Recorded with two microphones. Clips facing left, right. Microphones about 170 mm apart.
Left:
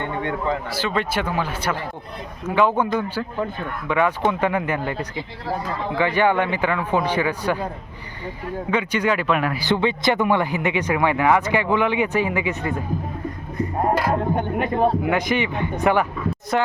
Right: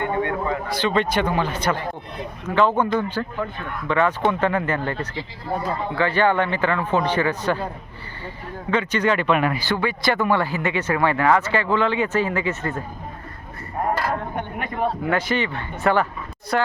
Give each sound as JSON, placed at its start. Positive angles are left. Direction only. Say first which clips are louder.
{"t": 0.7, "sound": "speech", "louder": "right 3 dB", "side_deg": 5}
{"t": 8.7, "sound": "speech", "louder": "right 1 dB", "side_deg": 10}
{"t": 9.6, "sound": "speech", "louder": "left 3 dB", "side_deg": 20}
{"t": 14.3, "sound": "speech", "louder": "left 6 dB", "side_deg": 25}
{"t": 15.0, "sound": "speech", "louder": "left 1 dB", "side_deg": 15}